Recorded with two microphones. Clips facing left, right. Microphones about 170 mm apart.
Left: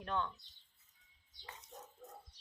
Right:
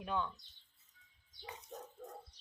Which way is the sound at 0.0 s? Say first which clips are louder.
Right 1 dB; 5° right (ahead or behind).